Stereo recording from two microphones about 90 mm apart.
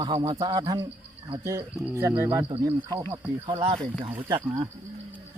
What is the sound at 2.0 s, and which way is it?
Speech, 30° right (ahead or behind).